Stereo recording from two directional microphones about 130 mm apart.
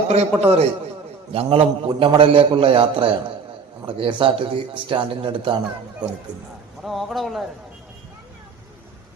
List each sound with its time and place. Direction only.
0.1 s a man's voice: 55° right (ahead or behind)
6.8 s speech: centre (ahead or behind)